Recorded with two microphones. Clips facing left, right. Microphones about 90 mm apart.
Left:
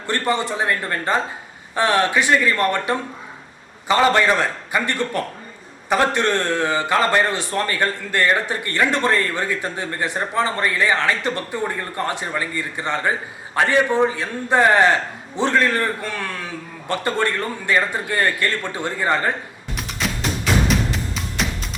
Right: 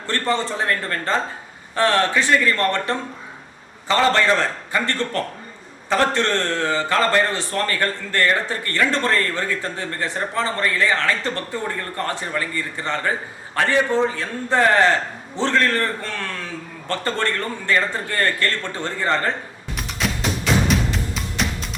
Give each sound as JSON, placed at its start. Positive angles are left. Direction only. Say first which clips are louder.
{"t": 0.1, "sound": "a man's voice", "louder": "left 1 dB", "side_deg": 15}
{"t": 19.7, "sound": "music", "louder": "right 1 dB", "side_deg": 0}